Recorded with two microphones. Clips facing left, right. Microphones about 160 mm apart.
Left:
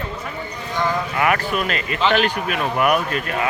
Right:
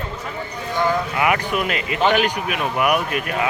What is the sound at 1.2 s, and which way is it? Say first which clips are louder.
Speech: even; 15° right (ahead or behind).